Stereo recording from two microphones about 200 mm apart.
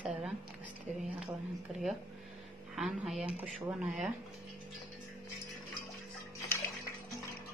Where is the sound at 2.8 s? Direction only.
Centre (ahead or behind).